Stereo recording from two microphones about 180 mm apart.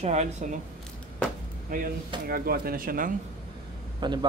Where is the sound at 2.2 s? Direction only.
55° right (ahead or behind).